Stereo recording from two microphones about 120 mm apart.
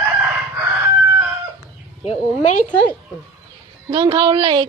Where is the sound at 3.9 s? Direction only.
40° right (ahead or behind).